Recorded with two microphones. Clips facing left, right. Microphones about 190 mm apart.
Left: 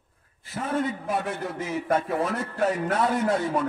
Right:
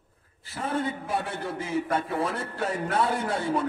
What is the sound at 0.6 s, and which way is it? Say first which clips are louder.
A man's voice: left 2 dB; 30° right (ahead or behind).